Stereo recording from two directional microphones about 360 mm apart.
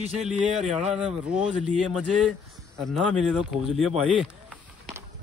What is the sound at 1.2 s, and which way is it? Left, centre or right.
A man's voice, centre.